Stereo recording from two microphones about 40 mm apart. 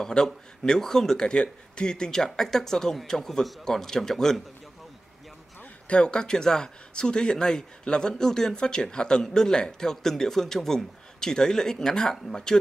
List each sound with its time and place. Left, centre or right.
0.0 s speech: centre
5.9 s speech: left